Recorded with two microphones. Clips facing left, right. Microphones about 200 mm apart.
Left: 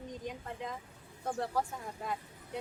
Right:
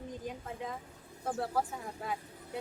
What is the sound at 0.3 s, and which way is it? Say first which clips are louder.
A woman's voice: even; 5° right (ahead or behind).